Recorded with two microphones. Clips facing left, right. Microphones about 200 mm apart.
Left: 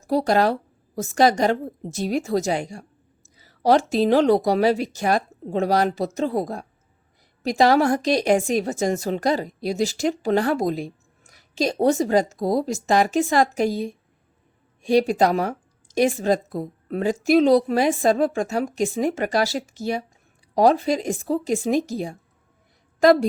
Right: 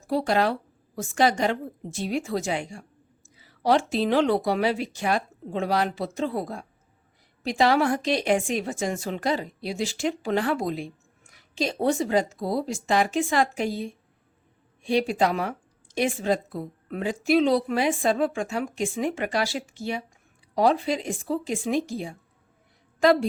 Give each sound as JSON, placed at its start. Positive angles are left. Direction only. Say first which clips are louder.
{"t": 0.0, "sound": "a woman's voice", "louder": "left 4 dB", "side_deg": 40}